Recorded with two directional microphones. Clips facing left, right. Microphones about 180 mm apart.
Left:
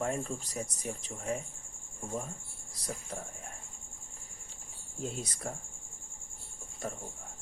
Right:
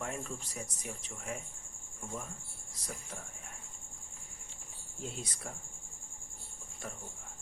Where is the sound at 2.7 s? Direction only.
35° left (ahead or behind).